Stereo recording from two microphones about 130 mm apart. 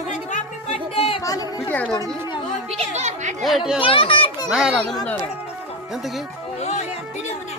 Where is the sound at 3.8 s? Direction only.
45° left (ahead or behind).